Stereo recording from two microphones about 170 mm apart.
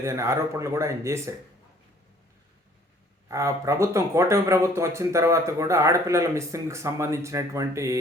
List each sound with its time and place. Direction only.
0.0 s speech: 15° right (ahead or behind)
3.2 s speech: 15° right (ahead or behind)